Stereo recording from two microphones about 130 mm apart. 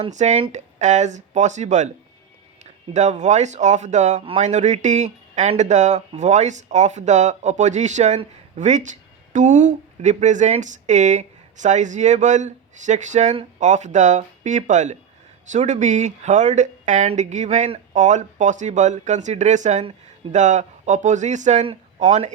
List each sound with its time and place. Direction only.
0.1 s speech: 65° right (ahead or behind)
2.9 s speech: 65° right (ahead or behind)